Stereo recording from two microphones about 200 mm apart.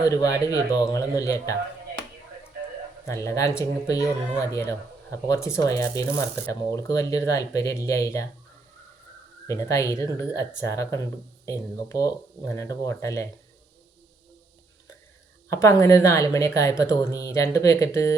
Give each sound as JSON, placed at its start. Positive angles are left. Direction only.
{"t": 0.0, "sound": "speech", "side_deg": 15}
{"t": 3.1, "sound": "speech", "side_deg": 15}
{"t": 9.5, "sound": "speech", "side_deg": 15}
{"t": 15.4, "sound": "speech", "side_deg": 15}